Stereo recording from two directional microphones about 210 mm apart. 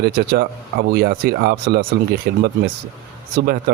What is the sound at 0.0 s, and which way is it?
Speech, 50° right (ahead or behind).